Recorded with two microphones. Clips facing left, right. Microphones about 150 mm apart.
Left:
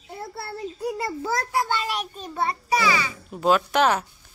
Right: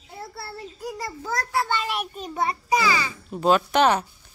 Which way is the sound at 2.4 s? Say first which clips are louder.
Even; 15° right (ahead or behind).